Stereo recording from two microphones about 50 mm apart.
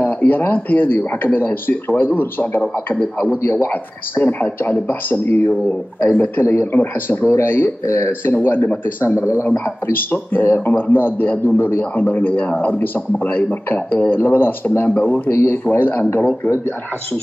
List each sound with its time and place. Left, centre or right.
0.0 s a man's voice: left
6.4 s a man's voice: left
6.7 s a man's voice: left
7.2 s a man's voice: left
7.8 s a man's voice: left
8.3 s a man's voice: left
9.0 s a man's voice: left
10.3 s a man's voice: left
15.8 s a man's voice: left